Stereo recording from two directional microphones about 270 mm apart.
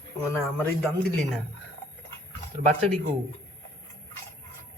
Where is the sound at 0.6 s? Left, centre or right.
Centre.